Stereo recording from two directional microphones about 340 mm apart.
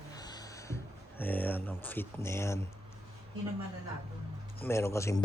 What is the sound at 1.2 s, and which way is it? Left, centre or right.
Speech, centre.